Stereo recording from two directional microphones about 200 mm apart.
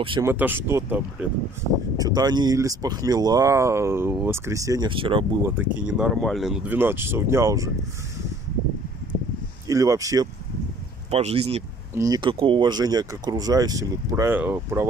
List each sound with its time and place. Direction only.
0.2 s speech: 10° right (ahead or behind)
5.4 s speech: 5° right (ahead or behind)
9.7 s speech: 15° right (ahead or behind)
11.1 s speech: 30° right (ahead or behind)
11.9 s speech: 20° right (ahead or behind)